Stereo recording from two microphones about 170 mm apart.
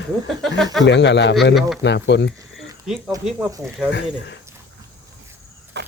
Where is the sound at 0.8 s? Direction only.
90° left.